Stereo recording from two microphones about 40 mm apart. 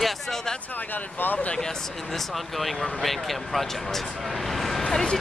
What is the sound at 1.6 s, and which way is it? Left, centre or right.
Speech, centre.